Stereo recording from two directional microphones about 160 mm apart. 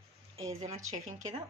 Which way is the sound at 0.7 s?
45° right (ahead or behind).